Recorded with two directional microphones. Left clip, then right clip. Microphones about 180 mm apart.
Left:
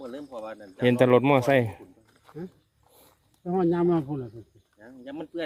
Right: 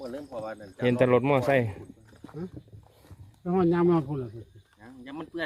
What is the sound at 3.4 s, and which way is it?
Speech, 10° left (ahead or behind).